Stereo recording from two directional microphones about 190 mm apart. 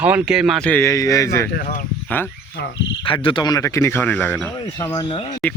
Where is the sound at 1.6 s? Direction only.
45° left (ahead or behind).